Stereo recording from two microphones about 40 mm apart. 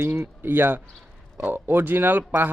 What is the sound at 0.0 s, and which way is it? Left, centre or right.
Speech, right.